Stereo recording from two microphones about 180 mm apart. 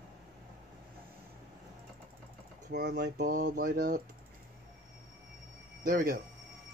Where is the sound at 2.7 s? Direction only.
65° right (ahead or behind).